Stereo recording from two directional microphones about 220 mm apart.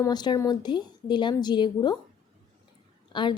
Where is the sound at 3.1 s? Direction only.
20° left (ahead or behind).